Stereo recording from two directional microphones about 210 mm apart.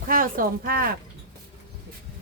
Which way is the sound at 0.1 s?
40° right (ahead or behind).